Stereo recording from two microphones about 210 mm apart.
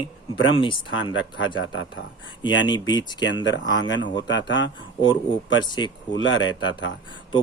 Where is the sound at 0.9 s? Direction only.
70° left (ahead or behind).